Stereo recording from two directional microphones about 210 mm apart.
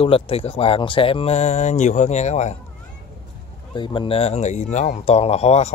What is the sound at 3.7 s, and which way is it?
Speech, 20° left (ahead or behind).